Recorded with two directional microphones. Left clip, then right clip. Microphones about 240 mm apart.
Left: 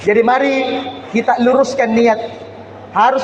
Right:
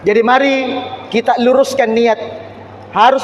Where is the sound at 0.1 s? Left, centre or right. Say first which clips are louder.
Right 1 dB; right.